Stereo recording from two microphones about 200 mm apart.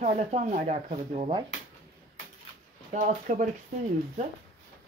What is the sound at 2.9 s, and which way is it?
Speech, 40° right (ahead or behind).